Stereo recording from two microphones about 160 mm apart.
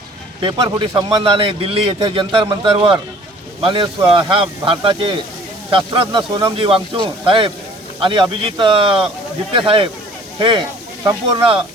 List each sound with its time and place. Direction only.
0.4 s speech: 30° right (ahead or behind)
11.3 s speech: 35° right (ahead or behind)